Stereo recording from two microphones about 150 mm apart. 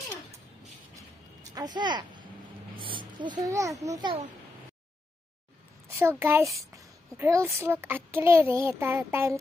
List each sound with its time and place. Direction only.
1.4 s a child's voice: 25° right (ahead or behind)
5.9 s a child's voice: 15° right (ahead or behind)